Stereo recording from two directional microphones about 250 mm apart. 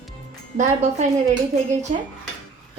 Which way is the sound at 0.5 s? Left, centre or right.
Right.